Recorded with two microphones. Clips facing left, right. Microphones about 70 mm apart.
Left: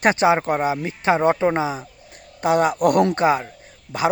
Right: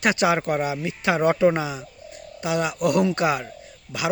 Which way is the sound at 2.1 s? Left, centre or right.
Left.